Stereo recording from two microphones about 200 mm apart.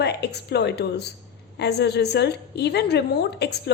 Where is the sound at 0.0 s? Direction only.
55° left (ahead or behind).